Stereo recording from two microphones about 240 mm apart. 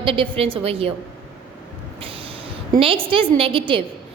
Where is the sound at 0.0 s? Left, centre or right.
Right.